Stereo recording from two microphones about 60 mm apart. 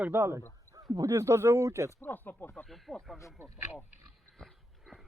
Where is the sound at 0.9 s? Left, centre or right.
Right.